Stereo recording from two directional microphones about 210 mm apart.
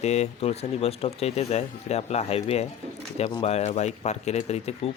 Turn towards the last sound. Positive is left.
turn(degrees=30)  # may be behind; listen again after turning